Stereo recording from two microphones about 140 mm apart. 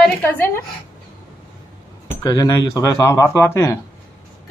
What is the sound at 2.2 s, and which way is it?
A man's voice, 25° left (ahead or behind).